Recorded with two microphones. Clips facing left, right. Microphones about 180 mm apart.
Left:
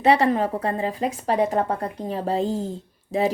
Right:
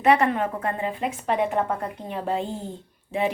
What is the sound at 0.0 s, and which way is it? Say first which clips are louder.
A woman's voice: left 2 dB; 30° left (ahead or behind).